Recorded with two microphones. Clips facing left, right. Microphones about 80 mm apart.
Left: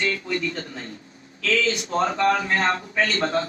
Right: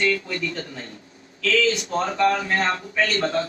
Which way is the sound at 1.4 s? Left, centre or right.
Left.